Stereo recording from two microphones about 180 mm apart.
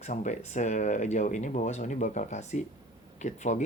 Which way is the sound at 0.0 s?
40° left (ahead or behind).